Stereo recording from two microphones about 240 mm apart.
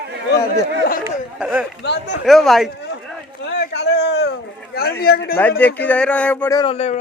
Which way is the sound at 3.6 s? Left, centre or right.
Left.